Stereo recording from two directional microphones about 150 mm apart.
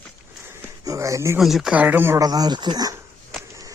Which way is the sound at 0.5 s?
20° right (ahead or behind).